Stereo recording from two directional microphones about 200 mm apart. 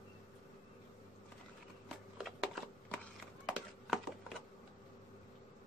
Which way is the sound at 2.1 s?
Centre (ahead or behind).